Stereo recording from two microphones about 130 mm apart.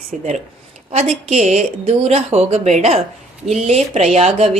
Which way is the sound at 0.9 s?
60° right (ahead or behind).